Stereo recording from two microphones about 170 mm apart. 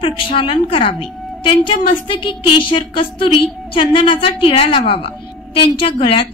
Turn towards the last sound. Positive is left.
turn(degrees=30)  # may be behind; listen again after turning